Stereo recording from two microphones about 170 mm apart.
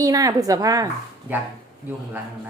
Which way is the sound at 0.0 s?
20° right (ahead or behind).